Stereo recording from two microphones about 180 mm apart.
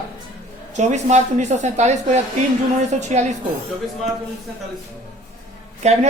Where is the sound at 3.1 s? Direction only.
40° right (ahead or behind).